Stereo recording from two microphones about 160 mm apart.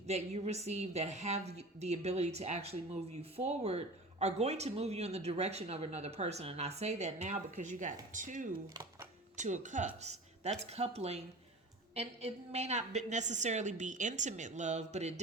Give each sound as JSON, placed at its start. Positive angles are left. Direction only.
{"t": 0.1, "sound": "a woman's voice", "side_deg": -40}
{"t": 8.7, "sound": "computer keyboard", "side_deg": -25}
{"t": 9.3, "sound": "a woman's voice", "side_deg": -50}